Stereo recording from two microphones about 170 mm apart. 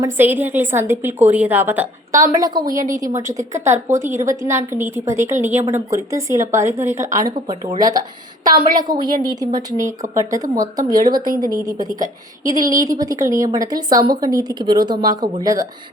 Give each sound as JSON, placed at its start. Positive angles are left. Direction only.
{"t": 0.0, "sound": "a woman's voice", "side_deg": -10}
{"t": 11.9, "sound": "a woman's voice", "side_deg": -50}
{"t": 12.8, "sound": "a woman's voice", "side_deg": -20}